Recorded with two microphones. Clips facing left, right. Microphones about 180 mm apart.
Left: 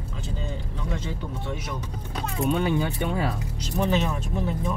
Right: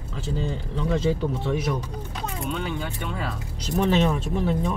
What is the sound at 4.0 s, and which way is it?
Speech, 70° right (ahead or behind).